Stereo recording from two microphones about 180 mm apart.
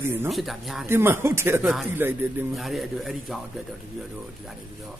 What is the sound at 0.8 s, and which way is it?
Speech, 10° right (ahead or behind).